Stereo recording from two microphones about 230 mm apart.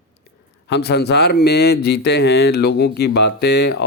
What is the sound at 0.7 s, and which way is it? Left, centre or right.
A man's voice, left.